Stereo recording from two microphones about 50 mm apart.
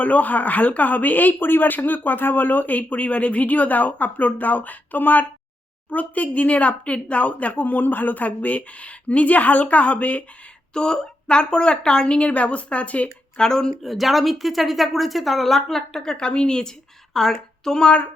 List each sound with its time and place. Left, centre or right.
0.0 s speech: left
10.8 s speech: centre
13.4 s a woman's voice: centre
13.9 s a woman's voice: centre